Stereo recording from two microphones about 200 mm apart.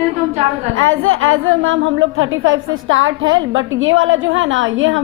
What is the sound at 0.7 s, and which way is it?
A woman's voice, 85° right.